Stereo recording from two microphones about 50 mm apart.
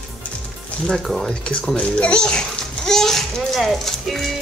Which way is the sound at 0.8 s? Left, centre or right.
Centre.